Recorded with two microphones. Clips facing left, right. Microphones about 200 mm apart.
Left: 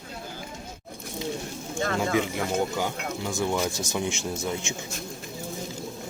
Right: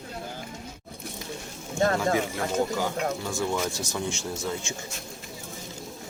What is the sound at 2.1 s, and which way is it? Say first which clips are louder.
Speech: left 1 dB; 20° left (ahead or behind).